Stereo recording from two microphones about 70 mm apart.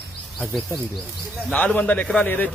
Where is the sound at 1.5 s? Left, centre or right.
Left.